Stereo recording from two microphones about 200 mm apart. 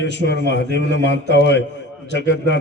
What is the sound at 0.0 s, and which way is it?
A man's voice, 60° left (ahead or behind).